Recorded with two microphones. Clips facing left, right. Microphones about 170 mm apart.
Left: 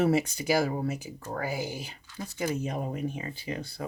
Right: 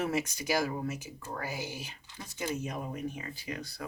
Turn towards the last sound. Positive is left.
turn(degrees=30)  # may be behind; listen again after turning